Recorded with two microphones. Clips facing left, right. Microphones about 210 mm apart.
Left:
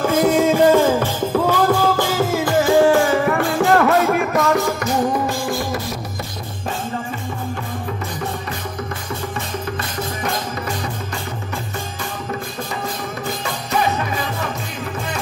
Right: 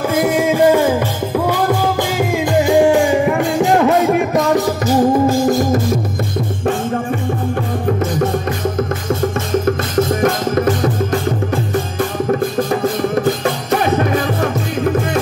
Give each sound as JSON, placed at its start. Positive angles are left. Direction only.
{"t": 0.1, "sound": "music", "side_deg": -15}
{"t": 4.8, "sound": "music", "side_deg": -40}
{"t": 10.2, "sound": "music", "side_deg": -45}
{"t": 12.3, "sound": "music", "side_deg": -50}